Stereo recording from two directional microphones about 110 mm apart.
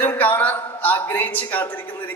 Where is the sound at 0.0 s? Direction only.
15° left (ahead or behind).